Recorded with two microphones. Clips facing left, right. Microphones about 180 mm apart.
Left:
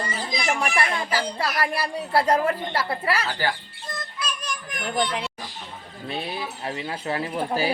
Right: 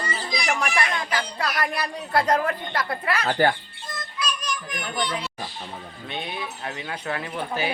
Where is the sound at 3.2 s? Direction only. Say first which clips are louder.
Right 6 dB; 55° right (ahead or behind).